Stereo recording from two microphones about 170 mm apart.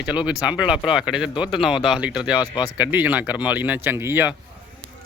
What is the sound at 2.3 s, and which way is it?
Speech, 25° left (ahead or behind).